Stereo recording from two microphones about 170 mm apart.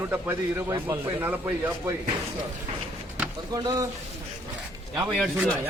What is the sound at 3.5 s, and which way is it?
Speech, 20° right (ahead or behind).